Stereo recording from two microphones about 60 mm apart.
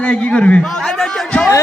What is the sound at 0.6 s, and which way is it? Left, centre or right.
Speech, centre.